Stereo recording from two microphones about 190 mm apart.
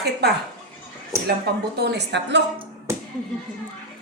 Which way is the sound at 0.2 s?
60° right (ahead or behind).